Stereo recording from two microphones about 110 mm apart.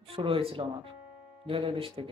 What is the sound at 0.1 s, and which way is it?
Speech, 55° right (ahead or behind).